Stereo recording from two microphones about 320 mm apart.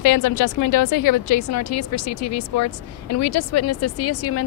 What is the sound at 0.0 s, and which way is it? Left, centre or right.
Speech, left.